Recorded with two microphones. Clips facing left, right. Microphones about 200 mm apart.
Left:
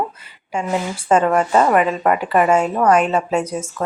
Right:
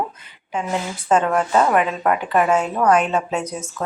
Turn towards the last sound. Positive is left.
turn(degrees=10)  # may be behind; listen again after turning